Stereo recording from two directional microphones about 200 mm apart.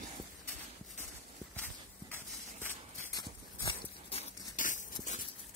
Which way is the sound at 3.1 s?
30° left (ahead or behind).